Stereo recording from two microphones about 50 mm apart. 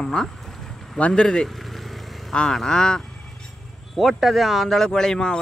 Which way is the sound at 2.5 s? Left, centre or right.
Centre.